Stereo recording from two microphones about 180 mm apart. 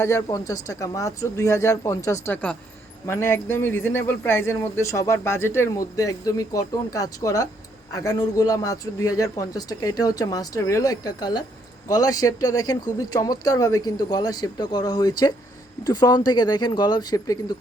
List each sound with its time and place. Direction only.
0.0 s a man's voice: 15° left (ahead or behind)